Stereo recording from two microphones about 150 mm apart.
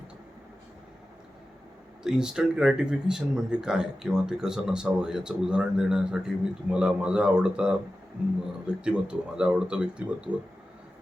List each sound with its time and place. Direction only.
2.0 s speech: 5° right (ahead or behind)